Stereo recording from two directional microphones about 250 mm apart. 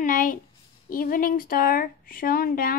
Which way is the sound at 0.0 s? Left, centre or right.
Left.